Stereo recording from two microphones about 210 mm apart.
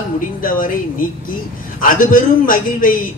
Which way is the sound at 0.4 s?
40° left (ahead or behind).